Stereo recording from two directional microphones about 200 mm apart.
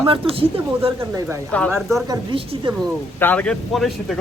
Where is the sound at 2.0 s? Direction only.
25° right (ahead or behind).